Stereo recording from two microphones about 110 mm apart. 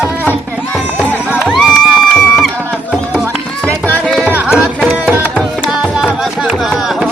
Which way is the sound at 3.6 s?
15° left (ahead or behind).